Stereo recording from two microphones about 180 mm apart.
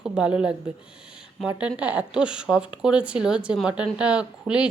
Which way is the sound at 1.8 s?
5° right (ahead or behind).